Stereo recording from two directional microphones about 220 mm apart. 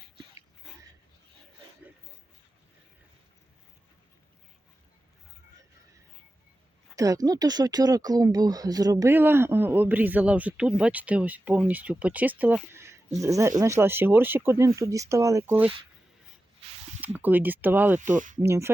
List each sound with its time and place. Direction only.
6.9 s speech: 15° right (ahead or behind)
17.0 s speech: 10° right (ahead or behind)
18.0 s speech: 35° right (ahead or behind)
18.3 s speech: 10° right (ahead or behind)